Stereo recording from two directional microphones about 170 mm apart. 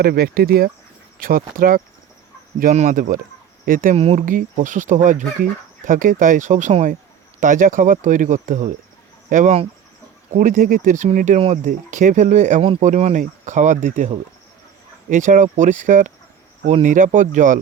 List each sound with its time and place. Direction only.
0.0 s speech: 65° right (ahead or behind)
3.9 s speech: 35° right (ahead or behind)
4.3 s speech: 50° right (ahead or behind)
15.1 s speech: 50° right (ahead or behind)